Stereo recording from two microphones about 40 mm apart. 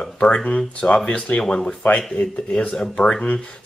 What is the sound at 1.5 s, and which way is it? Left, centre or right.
Speech, centre.